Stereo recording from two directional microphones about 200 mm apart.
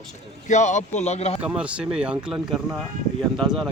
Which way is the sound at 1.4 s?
5° right (ahead or behind).